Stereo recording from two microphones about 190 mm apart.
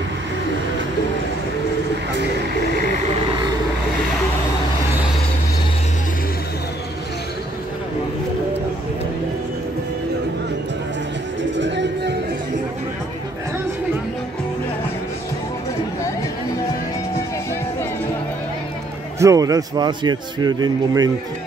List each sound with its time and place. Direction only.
11.5 s music: 70° right (ahead or behind)
19.1 s a man's voice: 15° right (ahead or behind)